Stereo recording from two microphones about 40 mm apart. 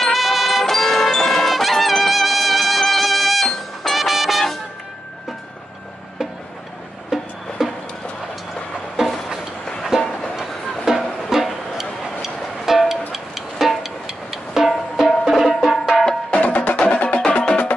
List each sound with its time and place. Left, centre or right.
0.0 s music: centre
0.7 s music: centre
7.1 s music: centre
9.9 s music: centre
10.4 s music: centre
16.3 s music: left
17.2 s music: left